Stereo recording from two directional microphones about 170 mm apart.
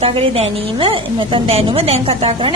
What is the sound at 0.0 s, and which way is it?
A woman's voice, 35° right (ahead or behind).